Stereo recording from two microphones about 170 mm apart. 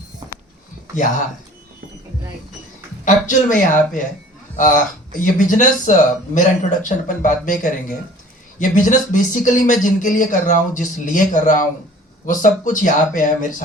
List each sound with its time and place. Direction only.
3.0 s a man's voice: 50° left (ahead or behind)